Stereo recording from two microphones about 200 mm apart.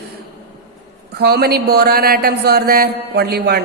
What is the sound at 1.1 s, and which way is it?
Speech, 55° right (ahead or behind).